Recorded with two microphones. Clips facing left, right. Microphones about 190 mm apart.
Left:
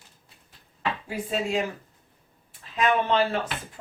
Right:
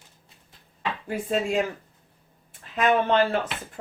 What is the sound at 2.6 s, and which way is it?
Speech, 50° right (ahead or behind).